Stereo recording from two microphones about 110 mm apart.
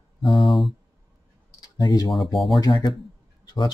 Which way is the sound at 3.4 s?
40° left (ahead or behind).